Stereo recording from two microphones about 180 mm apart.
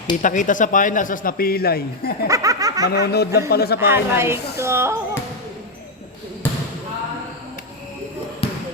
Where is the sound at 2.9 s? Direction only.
60° left (ahead or behind).